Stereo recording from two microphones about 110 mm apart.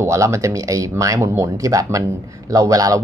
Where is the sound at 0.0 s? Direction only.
25° right (ahead or behind).